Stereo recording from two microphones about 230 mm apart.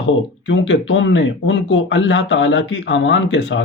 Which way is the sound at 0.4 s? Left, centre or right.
Left.